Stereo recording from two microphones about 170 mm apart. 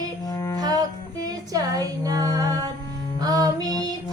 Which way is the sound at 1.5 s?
20° right (ahead or behind).